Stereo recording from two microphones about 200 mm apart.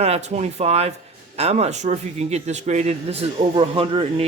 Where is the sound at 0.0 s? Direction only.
35° right (ahead or behind).